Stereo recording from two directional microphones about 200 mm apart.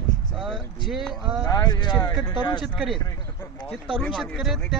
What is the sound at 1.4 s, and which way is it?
Speech, 20° left (ahead or behind).